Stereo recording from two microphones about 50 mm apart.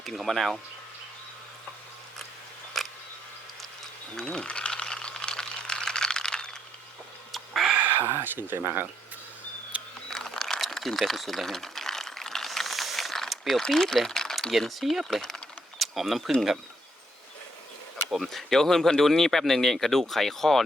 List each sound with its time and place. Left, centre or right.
0.0 s speech: centre
2.8 s camera: centre
4.2 s speech: centre
4.4 s a sound: left
7.3 s bird: centre
7.7 s a sound: right
8.0 s speech: right
10.1 s a sound: centre
13.5 s speech: centre
14.8 s speech: centre
18.1 s speech: centre